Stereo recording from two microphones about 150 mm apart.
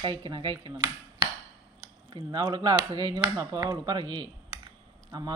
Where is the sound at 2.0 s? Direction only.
30° right (ahead or behind).